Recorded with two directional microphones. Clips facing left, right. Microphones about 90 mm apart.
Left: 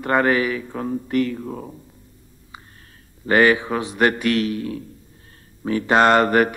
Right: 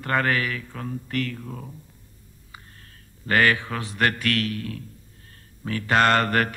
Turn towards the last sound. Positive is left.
turn(degrees=15)  # may be behind; listen again after turning